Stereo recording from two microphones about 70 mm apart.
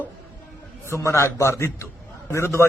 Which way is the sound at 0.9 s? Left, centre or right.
Left.